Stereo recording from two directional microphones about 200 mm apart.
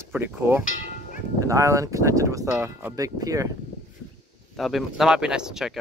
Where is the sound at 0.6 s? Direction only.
40° left (ahead or behind).